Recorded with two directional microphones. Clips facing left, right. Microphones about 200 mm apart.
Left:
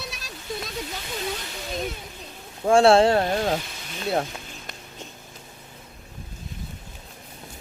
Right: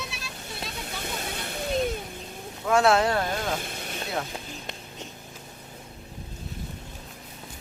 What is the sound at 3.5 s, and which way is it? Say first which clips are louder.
Speech: left 4 dB; 55° right (ahead or behind).